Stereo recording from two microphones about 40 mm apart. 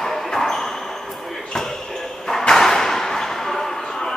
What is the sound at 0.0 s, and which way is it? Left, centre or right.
Basketball bounce, centre.